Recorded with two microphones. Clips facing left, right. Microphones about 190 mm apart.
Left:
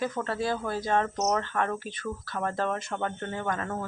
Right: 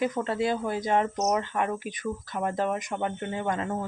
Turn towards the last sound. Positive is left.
turn(degrees=-20)  # may be behind; listen again after turning